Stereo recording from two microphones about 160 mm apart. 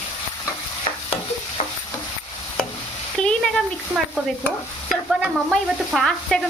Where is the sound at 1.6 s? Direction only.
45° left (ahead or behind).